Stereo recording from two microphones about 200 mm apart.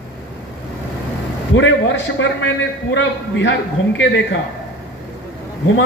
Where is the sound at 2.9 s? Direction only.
65° left (ahead or behind).